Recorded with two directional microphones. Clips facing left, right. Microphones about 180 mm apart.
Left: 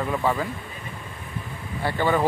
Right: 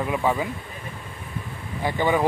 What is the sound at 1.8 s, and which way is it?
Speech, 15° right (ahead or behind).